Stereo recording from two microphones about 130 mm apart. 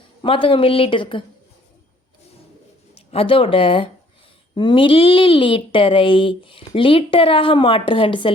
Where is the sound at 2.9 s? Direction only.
45° left (ahead or behind).